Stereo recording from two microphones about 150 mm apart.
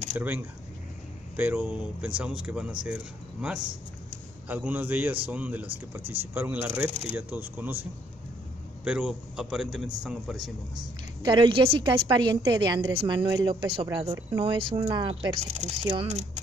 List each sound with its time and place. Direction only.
0.2 s a man's voice: 15° right (ahead or behind)
6.9 s speech: 50° right (ahead or behind)
7.2 s a man's voice: 10° right (ahead or behind)
8.8 s a man's voice: 10° right (ahead or behind)
11.2 s a woman's voice: 35° right (ahead or behind)
15.4 s speech: 50° right (ahead or behind)